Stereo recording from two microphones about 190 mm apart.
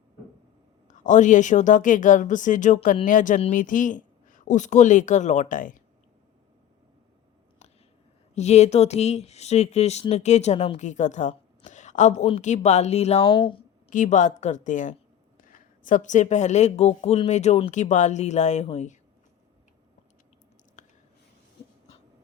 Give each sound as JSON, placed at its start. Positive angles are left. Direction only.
{"t": 0.9, "sound": "a woman's voice", "side_deg": 40}
{"t": 8.4, "sound": "a woman's voice", "side_deg": 35}
{"t": 13.9, "sound": "a woman's voice", "side_deg": 40}
{"t": 20.8, "sound": "a sound", "side_deg": 40}